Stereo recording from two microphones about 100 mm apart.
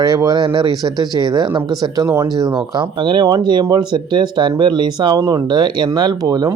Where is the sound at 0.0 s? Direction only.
40° right (ahead or behind).